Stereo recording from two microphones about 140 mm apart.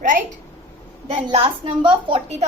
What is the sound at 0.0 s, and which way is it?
Speech, 70° right (ahead or behind).